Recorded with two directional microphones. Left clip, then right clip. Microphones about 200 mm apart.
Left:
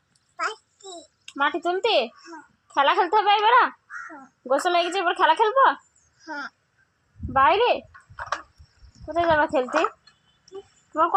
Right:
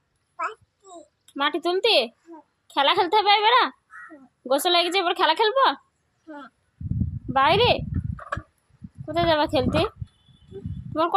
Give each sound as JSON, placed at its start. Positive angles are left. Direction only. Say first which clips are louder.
{"t": 1.4, "sound": "a child's voice", "louder": "even", "side_deg": -25}
{"t": 6.2, "sound": "speech", "louder": "left 8 dB", "side_deg": -5}
{"t": 7.3, "sound": "a child's voice", "louder": "even", "side_deg": -20}
{"t": 9.0, "sound": "a child's voice", "louder": "left 1 dB", "side_deg": -20}